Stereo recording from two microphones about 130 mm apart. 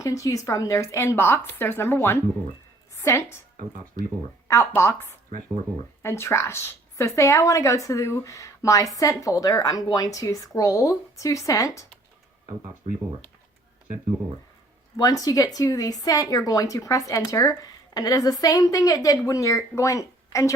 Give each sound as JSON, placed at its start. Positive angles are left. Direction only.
{"t": 0.0, "sound": "a woman's voice", "side_deg": 25}
{"t": 4.4, "sound": "a woman's voice", "side_deg": 20}
{"t": 14.9, "sound": "a woman's voice", "side_deg": 30}